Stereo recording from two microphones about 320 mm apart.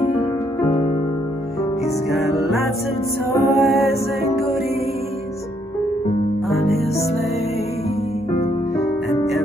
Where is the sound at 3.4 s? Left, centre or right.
Centre.